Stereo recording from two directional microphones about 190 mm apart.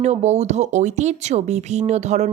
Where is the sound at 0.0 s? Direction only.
35° right (ahead or behind).